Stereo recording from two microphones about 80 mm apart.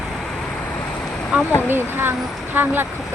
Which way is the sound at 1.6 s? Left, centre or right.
Right.